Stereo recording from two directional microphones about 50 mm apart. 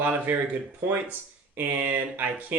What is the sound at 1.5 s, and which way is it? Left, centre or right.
Speech, right.